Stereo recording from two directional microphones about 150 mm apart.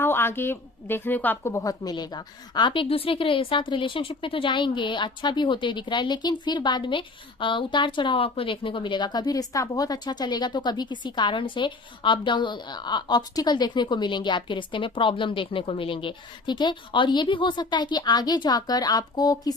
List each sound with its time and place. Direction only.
0.0 s a woman's voice: 15° left (ahead or behind)